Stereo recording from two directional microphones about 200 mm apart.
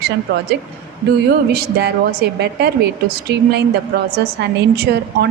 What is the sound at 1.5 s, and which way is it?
A woman's voice, 50° right (ahead or behind).